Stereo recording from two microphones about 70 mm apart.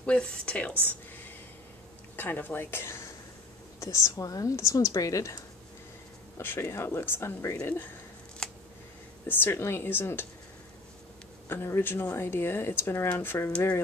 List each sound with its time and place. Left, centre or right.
0.0 s a woman's voice: centre
2.1 s speech: left
3.8 s a woman's voice: left
6.3 s speech: left
8.4 s a sound: centre
9.3 s speech: left
11.4 s speech: left